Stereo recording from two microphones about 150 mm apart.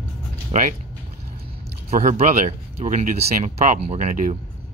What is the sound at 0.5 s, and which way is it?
Speech, 55° right (ahead or behind).